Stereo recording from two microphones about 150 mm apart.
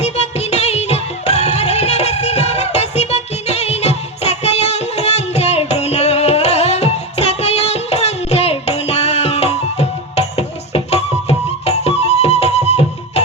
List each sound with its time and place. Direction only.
0.0 s music: 45° left (ahead or behind)